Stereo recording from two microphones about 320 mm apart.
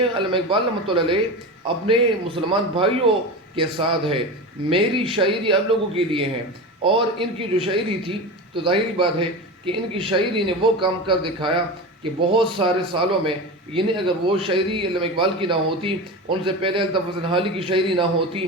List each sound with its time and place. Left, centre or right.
0.2 s speech: centre